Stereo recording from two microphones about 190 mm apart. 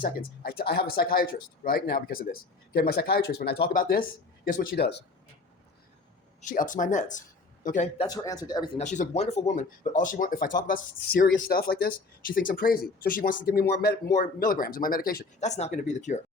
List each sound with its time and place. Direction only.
0.0 s speech: 50° left (ahead or behind)
6.4 s speech: 45° left (ahead or behind)
8.0 s speech: 20° left (ahead or behind)
8.8 s speech: 40° left (ahead or behind)
15.4 s speech: 35° left (ahead or behind)